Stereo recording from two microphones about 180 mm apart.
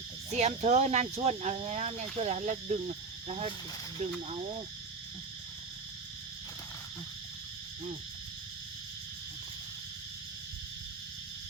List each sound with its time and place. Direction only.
0.3 s speech: 40° right (ahead or behind)